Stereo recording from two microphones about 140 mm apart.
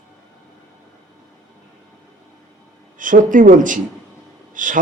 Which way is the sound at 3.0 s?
70° right (ahead or behind).